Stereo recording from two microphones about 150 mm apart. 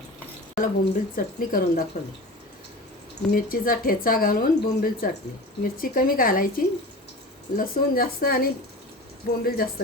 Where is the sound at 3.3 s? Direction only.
70° left (ahead or behind).